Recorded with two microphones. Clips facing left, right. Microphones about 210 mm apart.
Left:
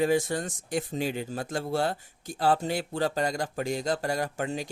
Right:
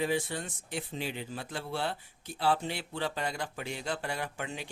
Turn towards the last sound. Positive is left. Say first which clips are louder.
# left 7 dB
turn(degrees=40)  # may be behind; listen again after turning